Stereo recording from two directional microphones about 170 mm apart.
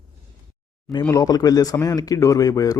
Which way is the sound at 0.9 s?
20° left (ahead or behind).